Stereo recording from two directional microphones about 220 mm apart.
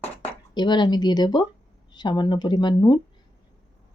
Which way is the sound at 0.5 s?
20° left (ahead or behind).